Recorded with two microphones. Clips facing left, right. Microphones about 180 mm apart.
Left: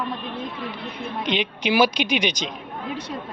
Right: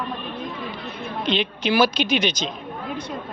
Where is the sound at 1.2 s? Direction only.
15° left (ahead or behind).